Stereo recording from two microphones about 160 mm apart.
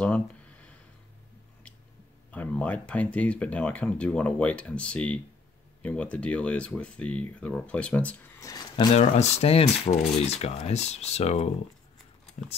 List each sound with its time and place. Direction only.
0.0 s a sound: 10° left (ahead or behind)
2.3 s speech: 10° left (ahead or behind)
8.4 s speech: 20° left (ahead or behind)
8.7 s speech: 40° left (ahead or behind)